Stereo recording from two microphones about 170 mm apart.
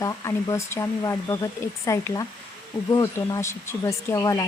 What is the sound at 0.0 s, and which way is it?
Speech, 20° left (ahead or behind).